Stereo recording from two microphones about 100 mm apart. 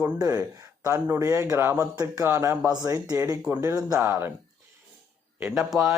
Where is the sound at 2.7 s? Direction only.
40° right (ahead or behind).